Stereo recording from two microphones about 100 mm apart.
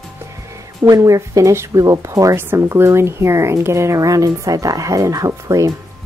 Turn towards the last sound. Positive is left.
turn(degrees=-35)  # may be behind; listen again after turning